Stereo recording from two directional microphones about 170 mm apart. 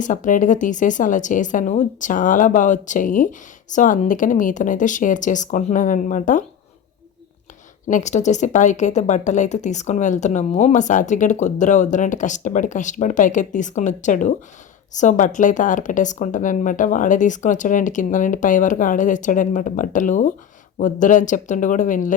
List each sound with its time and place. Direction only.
0.0 s a woman's voice: 50° left (ahead or behind)
7.9 s a woman's voice: 45° left (ahead or behind)